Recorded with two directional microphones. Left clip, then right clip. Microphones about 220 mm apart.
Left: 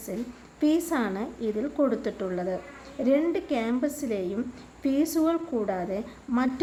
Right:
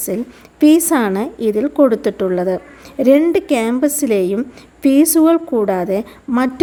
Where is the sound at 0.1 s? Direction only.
45° right (ahead or behind).